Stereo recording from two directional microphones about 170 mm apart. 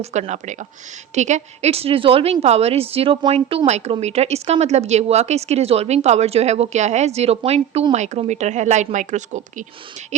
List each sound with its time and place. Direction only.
0.0 s a woman's voice: 45° right (ahead or behind)